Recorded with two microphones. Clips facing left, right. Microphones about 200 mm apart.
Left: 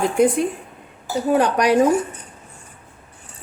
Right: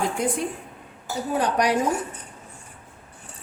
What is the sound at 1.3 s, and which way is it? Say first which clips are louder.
Speech: left 5 dB; 70° left (ahead or behind).